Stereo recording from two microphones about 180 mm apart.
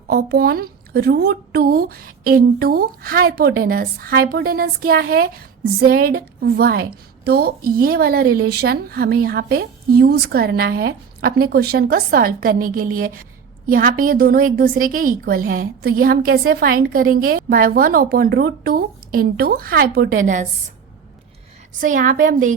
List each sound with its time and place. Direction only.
0.1 s a woman's voice: 60° right (ahead or behind)
21.8 s a woman's voice: 45° right (ahead or behind)